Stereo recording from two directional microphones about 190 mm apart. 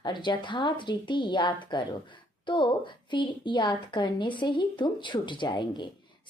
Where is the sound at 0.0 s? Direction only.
25° left (ahead or behind).